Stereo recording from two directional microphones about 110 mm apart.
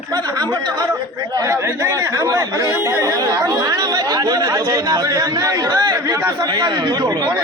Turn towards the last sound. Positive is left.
turn(degrees=-40)  # may be behind; listen again after turning